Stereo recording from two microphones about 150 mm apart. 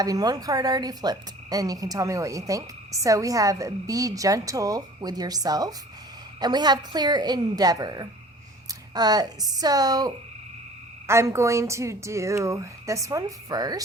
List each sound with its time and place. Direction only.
0.0 s frog: 25° right (ahead or behind)